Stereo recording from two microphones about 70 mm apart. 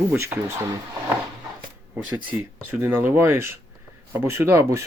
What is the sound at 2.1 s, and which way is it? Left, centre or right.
Speech, right.